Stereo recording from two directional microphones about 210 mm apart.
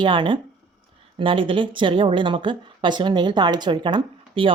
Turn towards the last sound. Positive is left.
turn(degrees=-25)  # may be behind; listen again after turning